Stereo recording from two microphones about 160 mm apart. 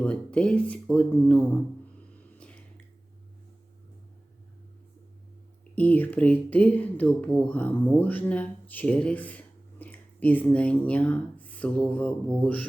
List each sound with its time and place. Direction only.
0.0 s speech: 10° left (ahead or behind)
5.7 s speech: 10° left (ahead or behind)